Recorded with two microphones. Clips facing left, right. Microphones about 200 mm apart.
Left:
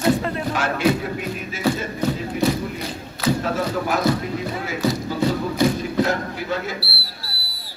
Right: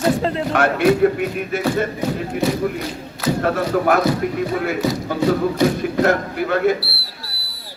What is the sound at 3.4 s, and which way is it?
Music, 60° right (ahead or behind).